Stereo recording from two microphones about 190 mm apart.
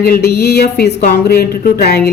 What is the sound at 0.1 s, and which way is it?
A woman's voice, 55° left (ahead or behind).